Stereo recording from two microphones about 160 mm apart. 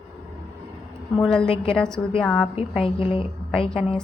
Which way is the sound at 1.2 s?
5° left (ahead or behind).